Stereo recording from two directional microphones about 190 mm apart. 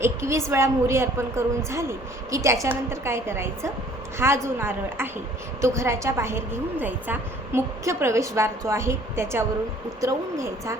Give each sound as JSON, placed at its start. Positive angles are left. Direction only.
{"t": 0.0, "sound": "a woman's voice", "side_deg": -15}